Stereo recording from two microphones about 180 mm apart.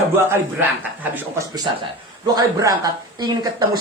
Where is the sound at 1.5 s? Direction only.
25° right (ahead or behind).